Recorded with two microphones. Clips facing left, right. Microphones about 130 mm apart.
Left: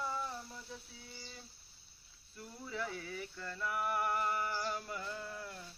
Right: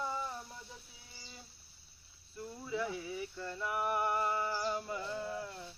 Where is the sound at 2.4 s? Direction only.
15° right (ahead or behind).